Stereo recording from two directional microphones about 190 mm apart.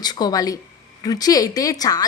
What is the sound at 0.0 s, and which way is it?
A woman's voice, 20° left (ahead or behind).